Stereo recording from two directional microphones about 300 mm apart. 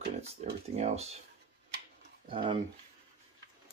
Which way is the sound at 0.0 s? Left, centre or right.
Right.